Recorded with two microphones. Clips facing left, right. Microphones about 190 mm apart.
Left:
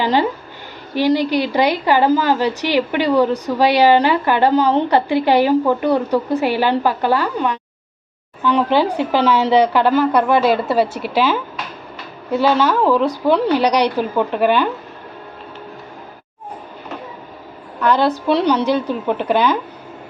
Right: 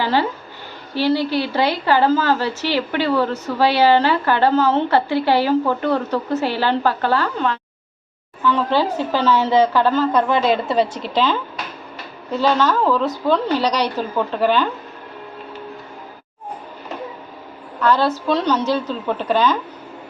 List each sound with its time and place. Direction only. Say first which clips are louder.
0.0 s a woman's voice: left 3 dB; 15° left (ahead or behind)
17.8 s a woman's voice: left 2 dB; 15° left (ahead or behind)